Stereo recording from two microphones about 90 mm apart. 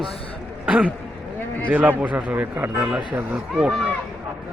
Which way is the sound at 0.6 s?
10° right (ahead or behind).